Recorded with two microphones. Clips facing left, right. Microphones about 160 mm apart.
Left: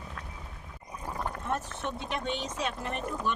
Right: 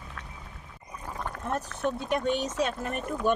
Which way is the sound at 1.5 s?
40° right (ahead or behind).